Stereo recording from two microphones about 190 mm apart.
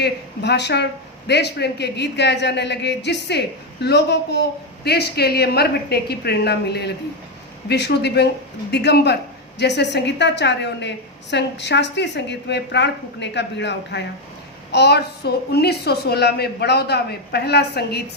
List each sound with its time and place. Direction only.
0.0 s a woman's voice: 65° left (ahead or behind)